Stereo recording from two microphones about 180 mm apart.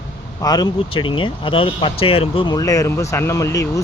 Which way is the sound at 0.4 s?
20° left (ahead or behind).